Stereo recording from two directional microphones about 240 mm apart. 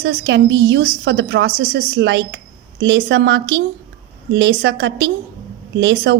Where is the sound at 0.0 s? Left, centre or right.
Right.